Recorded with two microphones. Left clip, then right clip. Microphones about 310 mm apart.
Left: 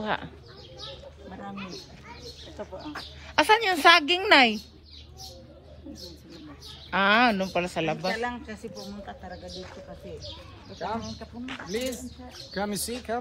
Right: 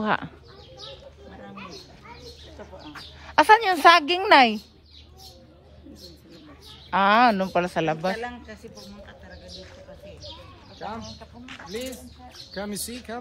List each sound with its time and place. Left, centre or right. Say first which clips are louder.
0.0 s speech: right 5 dB; right
1.5 s a sound: left 1 dB; right
3.3 s a woman's voice: right 5 dB; centre
6.9 s speech: right 3 dB; centre
8.2 s a man's voice: left 2 dB; left
12.5 s speech: left 2 dB; centre